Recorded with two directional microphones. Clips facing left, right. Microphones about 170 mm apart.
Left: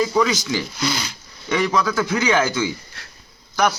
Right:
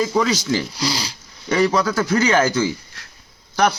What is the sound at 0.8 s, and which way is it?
Speech, 35° right (ahead or behind).